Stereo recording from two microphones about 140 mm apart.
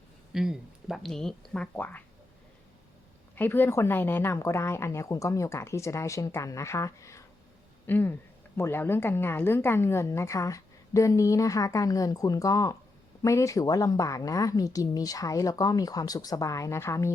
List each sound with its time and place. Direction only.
0.3 s speech: 5° right (ahead or behind); by 2.0 s 10° left (ahead or behind)
3.3 s a woman's voice: 15° left (ahead or behind)